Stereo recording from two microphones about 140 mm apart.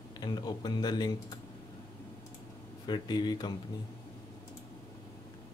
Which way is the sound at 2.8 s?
30° left (ahead or behind).